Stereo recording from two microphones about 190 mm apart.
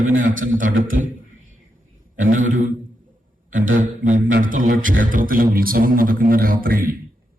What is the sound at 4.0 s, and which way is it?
A man's voice, 45° right (ahead or behind).